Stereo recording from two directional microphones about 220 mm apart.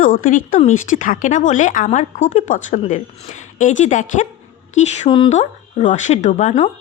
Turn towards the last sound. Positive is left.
turn(degrees=30)  # may be behind; listen again after turning